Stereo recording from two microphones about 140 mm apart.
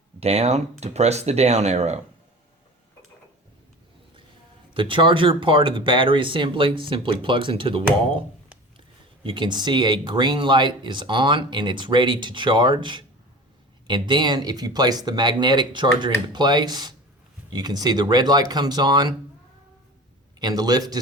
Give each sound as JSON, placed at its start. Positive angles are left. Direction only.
{"t": 0.2, "sound": "speech", "side_deg": -50}
{"t": 4.7, "sound": "speech", "side_deg": -35}
{"t": 9.2, "sound": "speech", "side_deg": -35}
{"t": 20.4, "sound": "speech", "side_deg": -30}